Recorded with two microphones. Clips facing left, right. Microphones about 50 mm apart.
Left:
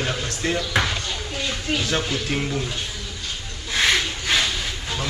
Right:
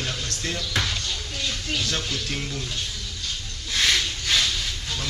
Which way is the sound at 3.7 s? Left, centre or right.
Centre.